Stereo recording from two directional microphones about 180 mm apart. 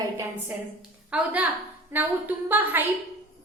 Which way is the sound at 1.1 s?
10° right (ahead or behind).